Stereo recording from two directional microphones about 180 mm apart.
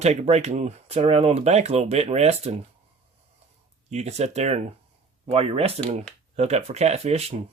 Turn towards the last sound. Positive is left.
turn(degrees=-35)  # may be behind; listen again after turning